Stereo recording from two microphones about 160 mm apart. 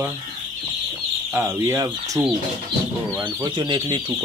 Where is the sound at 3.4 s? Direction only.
30° right (ahead or behind).